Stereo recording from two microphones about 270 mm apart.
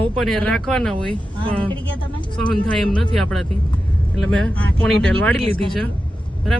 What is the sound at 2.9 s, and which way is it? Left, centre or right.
Speech, centre.